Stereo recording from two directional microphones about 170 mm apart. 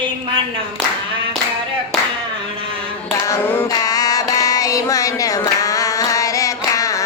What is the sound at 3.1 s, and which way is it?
Music, 15° left (ahead or behind).